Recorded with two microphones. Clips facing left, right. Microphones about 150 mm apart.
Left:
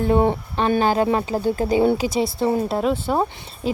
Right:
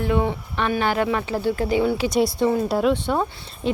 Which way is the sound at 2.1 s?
Centre (ahead or behind).